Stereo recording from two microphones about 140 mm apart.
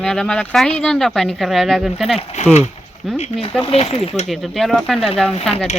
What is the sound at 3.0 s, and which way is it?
Speech, centre (ahead or behind).